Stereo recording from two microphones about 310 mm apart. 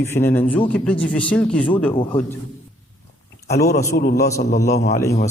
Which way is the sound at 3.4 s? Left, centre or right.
Left.